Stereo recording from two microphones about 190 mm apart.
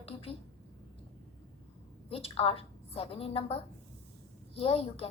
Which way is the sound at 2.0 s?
30° left (ahead or behind).